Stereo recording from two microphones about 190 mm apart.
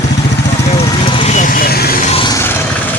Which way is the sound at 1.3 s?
45° left (ahead or behind).